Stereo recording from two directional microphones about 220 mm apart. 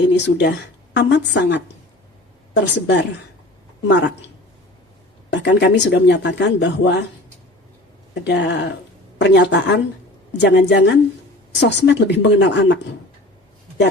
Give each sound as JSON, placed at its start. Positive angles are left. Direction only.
{"t": 0.1, "sound": "speech", "side_deg": 50}
{"t": 5.3, "sound": "speech", "side_deg": 55}
{"t": 8.2, "sound": "speech", "side_deg": 50}